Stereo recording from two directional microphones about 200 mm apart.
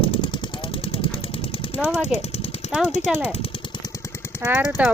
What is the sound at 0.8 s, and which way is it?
Vehicle, 25° left (ahead or behind).